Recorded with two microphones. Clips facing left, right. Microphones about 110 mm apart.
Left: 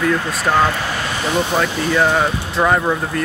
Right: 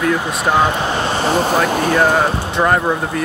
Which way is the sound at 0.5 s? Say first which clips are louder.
Right 1 dB; 20° right (ahead or behind).